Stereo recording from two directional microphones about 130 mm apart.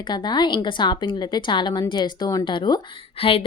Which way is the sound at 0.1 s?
35° left (ahead or behind).